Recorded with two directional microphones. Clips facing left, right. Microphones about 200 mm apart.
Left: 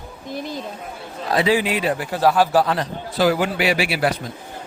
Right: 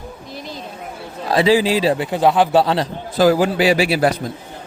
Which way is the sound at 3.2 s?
40° right (ahead or behind).